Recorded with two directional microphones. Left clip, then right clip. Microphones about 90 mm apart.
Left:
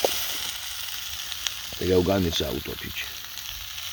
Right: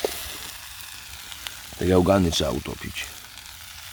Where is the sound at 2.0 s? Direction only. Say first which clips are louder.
Right 4 dB; 90° right.